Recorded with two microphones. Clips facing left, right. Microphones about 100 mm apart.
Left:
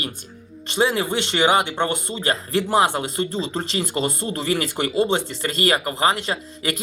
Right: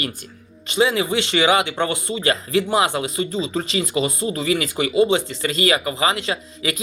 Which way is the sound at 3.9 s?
45° left (ahead or behind).